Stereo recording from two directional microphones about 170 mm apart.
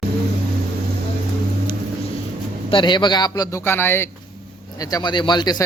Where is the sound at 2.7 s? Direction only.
25° left (ahead or behind).